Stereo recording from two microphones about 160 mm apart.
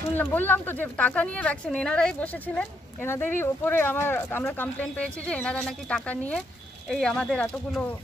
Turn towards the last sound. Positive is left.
turn(degrees=5)  # may be behind; listen again after turning